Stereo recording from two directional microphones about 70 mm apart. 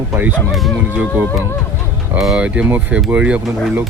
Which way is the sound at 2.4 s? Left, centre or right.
Centre.